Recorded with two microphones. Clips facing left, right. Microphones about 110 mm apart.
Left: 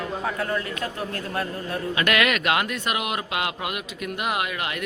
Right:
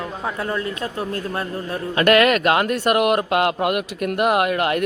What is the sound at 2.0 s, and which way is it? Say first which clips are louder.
Speech: right 9 dB; 40° right (ahead or behind).